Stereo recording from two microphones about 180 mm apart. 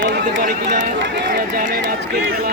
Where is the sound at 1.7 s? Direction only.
70° right (ahead or behind).